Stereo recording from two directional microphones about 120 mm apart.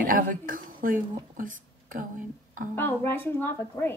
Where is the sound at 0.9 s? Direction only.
90° right.